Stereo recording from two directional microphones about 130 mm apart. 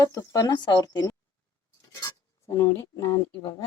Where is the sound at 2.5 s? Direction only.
25° left (ahead or behind).